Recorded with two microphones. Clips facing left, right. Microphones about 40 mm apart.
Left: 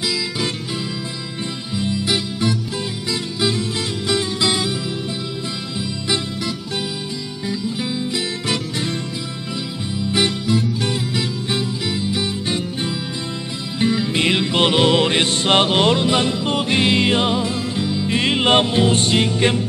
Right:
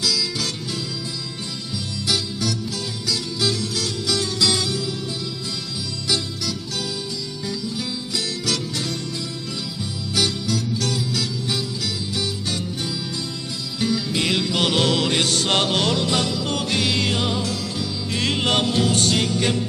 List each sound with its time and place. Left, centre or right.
0.0 s music: left
1.7 s music: left
6.0 s music: left
10.1 s music: left